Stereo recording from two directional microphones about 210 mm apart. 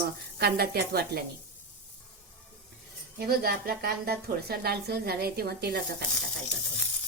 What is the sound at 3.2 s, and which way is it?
Speech, 45° right (ahead or behind).